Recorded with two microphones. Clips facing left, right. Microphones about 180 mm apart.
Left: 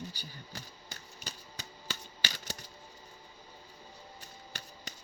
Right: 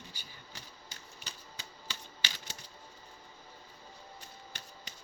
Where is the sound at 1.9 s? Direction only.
45° left (ahead or behind).